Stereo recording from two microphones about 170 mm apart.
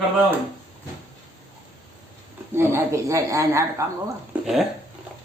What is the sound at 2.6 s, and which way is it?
A woman's voice, 15° right (ahead or behind).